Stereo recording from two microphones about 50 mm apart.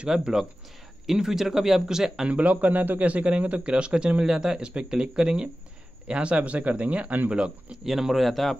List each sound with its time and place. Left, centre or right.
0.0 s a man's voice: centre
2.2 s a man's voice: right
2.5 s a man's voice: right
7.7 s speech: centre